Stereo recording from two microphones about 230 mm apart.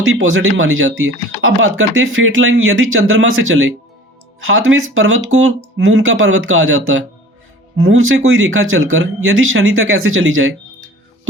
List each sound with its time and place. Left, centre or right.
0.0 s speech: right